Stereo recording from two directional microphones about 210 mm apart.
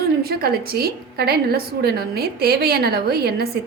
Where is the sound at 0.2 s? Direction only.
45° right (ahead or behind).